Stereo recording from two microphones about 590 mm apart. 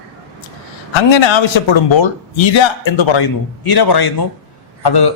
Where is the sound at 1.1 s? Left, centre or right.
Left.